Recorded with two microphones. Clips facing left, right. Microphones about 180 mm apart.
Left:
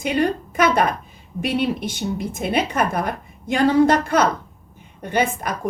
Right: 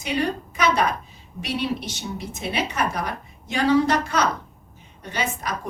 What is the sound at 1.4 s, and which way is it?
A woman's voice, 50° left (ahead or behind).